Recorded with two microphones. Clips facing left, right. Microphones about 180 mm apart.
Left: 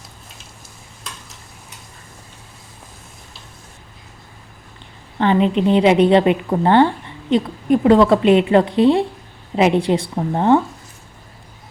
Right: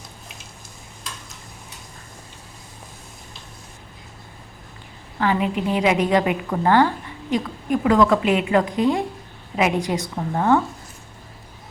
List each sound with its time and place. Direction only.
5.2 s a woman's voice: 30° left (ahead or behind)